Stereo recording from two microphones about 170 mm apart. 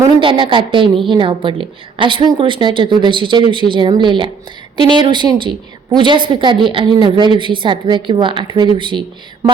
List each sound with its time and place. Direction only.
0.2 s a woman's voice: 30° right (ahead or behind)